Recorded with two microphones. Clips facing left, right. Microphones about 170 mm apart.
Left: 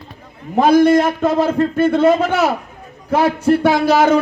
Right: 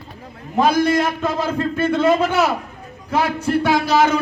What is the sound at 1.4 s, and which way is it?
Speech, 45° left (ahead or behind).